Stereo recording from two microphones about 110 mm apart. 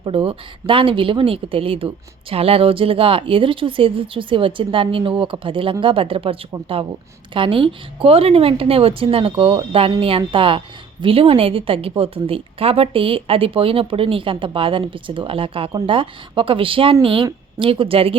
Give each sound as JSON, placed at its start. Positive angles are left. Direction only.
{"t": 0.0, "sound": "a woman's voice", "side_deg": -55}
{"t": 7.3, "sound": "a woman's voice", "side_deg": -50}